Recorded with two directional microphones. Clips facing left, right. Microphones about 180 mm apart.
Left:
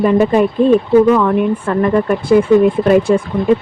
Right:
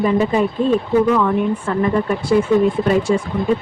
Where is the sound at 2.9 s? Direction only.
55° left (ahead or behind).